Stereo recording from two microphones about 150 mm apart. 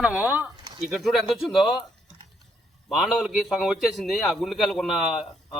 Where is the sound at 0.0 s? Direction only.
10° right (ahead or behind).